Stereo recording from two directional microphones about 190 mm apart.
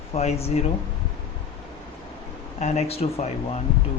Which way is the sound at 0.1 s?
35° left (ahead or behind).